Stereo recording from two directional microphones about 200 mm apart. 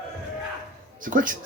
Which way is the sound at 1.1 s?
40° right (ahead or behind).